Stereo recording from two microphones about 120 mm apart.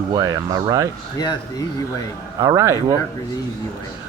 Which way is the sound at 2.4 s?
25° right (ahead or behind).